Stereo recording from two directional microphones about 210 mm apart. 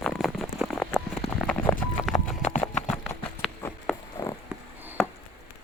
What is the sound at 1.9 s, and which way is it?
Clip-clop, centre (ahead or behind).